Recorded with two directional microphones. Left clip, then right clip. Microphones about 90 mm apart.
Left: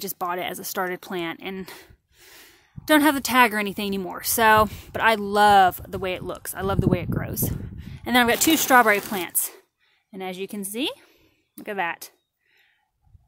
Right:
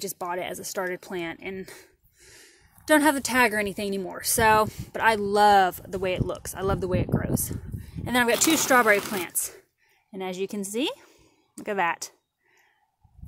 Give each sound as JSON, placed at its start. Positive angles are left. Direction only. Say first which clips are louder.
{"t": 0.0, "sound": "speech", "louder": "left 3 dB", "side_deg": 35}
{"t": 4.6, "sound": "speech", "louder": "left 2 dB", "side_deg": 50}
{"t": 4.9, "sound": "speech", "louder": "left 2 dB", "side_deg": 30}
{"t": 7.2, "sound": "speech", "louder": "right 1 dB", "side_deg": 40}
{"t": 10.1, "sound": "a woman's voice", "louder": "right 1 dB", "side_deg": 5}